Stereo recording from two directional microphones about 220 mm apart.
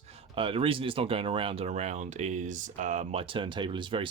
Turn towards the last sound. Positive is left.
turn(degrees=-20)  # may be behind; listen again after turning